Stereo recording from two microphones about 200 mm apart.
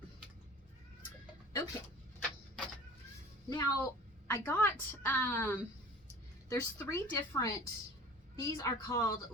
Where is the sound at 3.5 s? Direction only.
15° left (ahead or behind).